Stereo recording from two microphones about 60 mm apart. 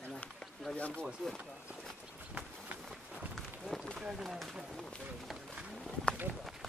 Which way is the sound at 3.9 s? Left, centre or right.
Centre.